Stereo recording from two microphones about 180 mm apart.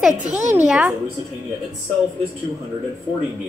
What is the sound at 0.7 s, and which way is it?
Speech, 5° right (ahead or behind).